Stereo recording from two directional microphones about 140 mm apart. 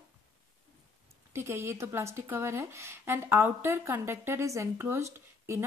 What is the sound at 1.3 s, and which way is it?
Speech, 15° right (ahead or behind).